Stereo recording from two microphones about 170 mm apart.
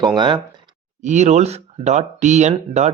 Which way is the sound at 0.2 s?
25° right (ahead or behind).